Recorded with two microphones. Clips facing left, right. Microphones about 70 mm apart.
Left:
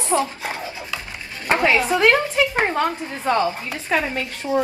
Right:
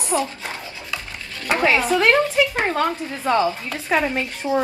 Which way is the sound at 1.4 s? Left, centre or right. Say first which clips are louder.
Even; left.